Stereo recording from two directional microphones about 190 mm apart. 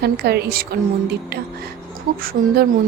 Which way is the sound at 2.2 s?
50° right (ahead or behind).